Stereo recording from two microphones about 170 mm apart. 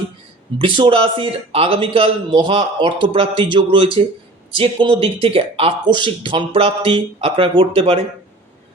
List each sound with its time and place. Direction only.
0.6 s speech: 30° right (ahead or behind)